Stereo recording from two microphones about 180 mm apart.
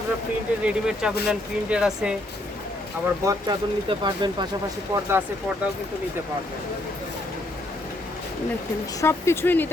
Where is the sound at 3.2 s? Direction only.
25° right (ahead or behind).